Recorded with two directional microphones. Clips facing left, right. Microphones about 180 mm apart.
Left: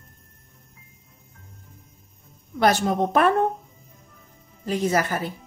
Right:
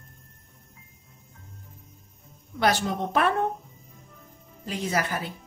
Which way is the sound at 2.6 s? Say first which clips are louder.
Left 5 dB; 45° left (ahead or behind).